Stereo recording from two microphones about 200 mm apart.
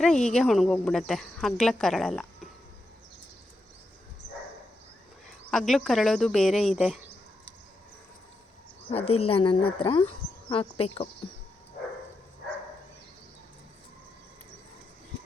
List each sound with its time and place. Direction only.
0.0 s speech: 5° left (ahead or behind)
5.5 s speech: centre (ahead or behind)
8.9 s a woman's voice: 25° left (ahead or behind)